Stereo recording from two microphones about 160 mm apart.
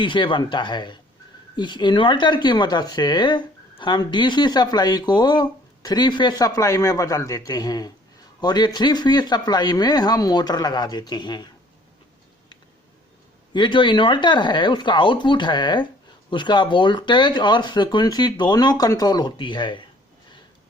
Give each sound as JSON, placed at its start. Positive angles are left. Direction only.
{"t": 0.0, "sound": "speech", "side_deg": 30}
{"t": 13.5, "sound": "speech", "side_deg": 30}